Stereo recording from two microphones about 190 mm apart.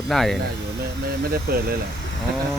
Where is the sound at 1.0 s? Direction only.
55° right (ahead or behind).